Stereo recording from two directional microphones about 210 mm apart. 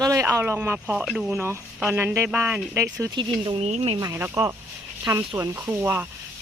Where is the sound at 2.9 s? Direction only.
20° right (ahead or behind).